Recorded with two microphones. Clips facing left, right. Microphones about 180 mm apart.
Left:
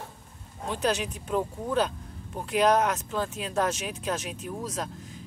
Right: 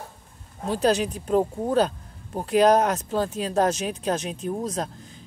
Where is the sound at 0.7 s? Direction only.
35° right (ahead or behind).